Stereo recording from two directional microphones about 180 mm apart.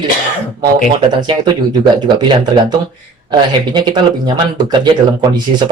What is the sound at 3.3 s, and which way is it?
Speech, 25° right (ahead or behind).